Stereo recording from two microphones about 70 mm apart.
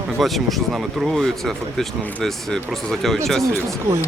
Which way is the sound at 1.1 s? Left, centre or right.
Centre.